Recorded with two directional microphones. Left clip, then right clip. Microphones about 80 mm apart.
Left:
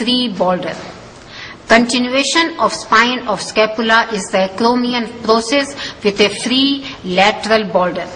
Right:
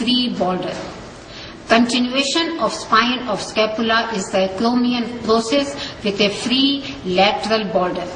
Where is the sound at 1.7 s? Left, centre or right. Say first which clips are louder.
Left 4 dB; left.